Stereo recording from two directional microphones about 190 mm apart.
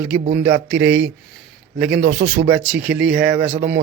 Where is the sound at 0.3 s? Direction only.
10° right (ahead or behind).